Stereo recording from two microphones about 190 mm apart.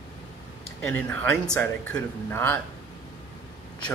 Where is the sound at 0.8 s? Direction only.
5° left (ahead or behind).